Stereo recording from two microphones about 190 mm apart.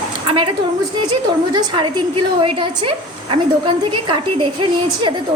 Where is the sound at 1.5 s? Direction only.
25° right (ahead or behind).